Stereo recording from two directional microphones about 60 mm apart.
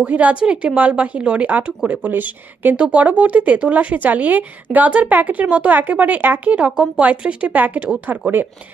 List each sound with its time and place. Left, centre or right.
0.0 s speech: right